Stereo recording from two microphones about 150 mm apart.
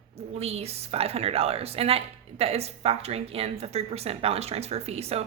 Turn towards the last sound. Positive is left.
turn(degrees=-45)  # may be behind; listen again after turning